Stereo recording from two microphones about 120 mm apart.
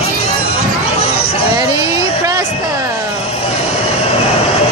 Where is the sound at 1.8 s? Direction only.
30° right (ahead or behind).